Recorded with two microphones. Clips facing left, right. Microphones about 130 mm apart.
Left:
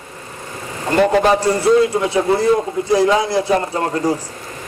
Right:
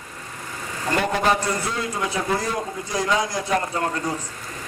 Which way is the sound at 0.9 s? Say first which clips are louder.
Left 8 dB; 25° left (ahead or behind).